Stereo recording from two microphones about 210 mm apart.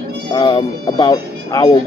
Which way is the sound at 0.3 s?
20° left (ahead or behind).